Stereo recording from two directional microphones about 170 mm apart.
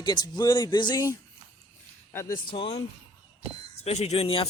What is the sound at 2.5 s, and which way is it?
Speech, 30° left (ahead or behind).